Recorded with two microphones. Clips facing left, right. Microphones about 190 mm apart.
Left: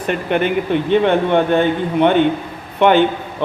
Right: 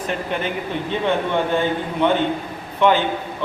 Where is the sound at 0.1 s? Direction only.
65° left (ahead or behind).